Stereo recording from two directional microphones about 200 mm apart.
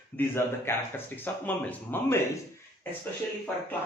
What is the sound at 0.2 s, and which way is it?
Speech, 10° left (ahead or behind).